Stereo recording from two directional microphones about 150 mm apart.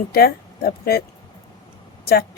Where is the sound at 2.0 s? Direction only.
90° left.